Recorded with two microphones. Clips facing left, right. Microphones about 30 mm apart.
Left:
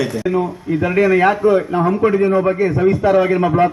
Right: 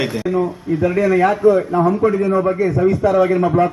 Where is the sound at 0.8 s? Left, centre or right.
Left.